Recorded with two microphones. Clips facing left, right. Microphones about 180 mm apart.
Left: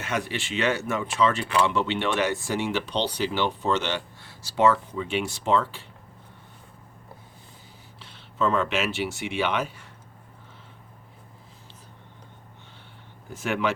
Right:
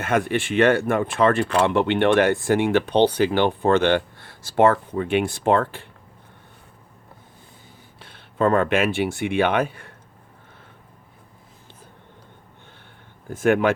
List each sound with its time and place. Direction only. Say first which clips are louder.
0.0 s speech: right 8 dB; 55° right (ahead or behind)
7.9 s speech: right 4 dB; 55° right (ahead or behind)
13.3 s speech: right 8 dB; 50° right (ahead or behind)